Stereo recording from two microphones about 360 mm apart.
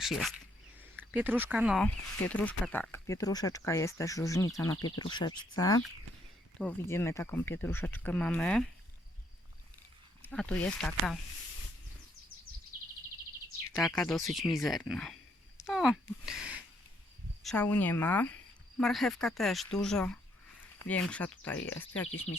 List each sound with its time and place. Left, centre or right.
0.0 s speech: centre
10.2 s speech: centre
13.7 s speech: centre
22.0 s speech: left